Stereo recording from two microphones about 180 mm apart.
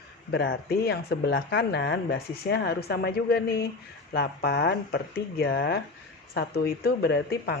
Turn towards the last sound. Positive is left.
turn(degrees=60)  # may be behind; listen again after turning